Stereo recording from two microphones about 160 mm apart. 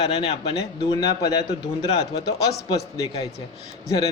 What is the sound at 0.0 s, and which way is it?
Speech, 40° left (ahead or behind).